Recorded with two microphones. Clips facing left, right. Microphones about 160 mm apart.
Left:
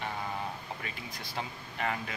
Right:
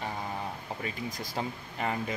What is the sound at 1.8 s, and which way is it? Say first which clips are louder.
Speech: right 3 dB; 30° right (ahead or behind).